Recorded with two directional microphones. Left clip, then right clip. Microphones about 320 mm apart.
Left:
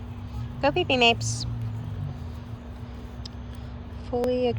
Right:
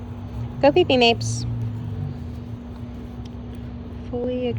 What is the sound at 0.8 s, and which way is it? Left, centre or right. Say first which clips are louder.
Speech: right 4 dB; right.